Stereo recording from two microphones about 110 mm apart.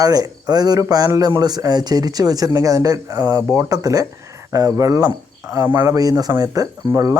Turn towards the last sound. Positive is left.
turn(degrees=-30)  # may be behind; listen again after turning